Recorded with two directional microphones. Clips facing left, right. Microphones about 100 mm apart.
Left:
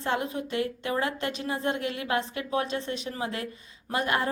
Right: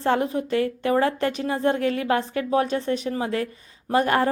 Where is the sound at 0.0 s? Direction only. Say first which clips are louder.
Right 7 dB; 35° right (ahead or behind).